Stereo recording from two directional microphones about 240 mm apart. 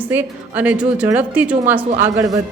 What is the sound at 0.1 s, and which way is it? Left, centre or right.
A woman's voice, centre.